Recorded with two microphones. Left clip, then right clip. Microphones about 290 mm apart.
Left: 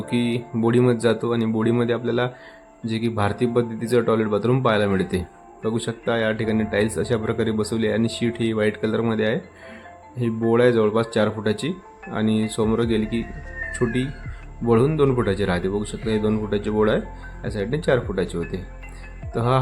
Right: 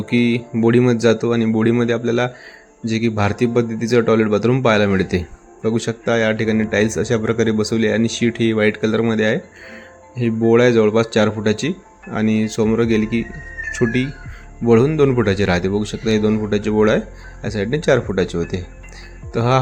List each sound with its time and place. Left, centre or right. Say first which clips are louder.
0.0 s a man's voice: right 6 dB; centre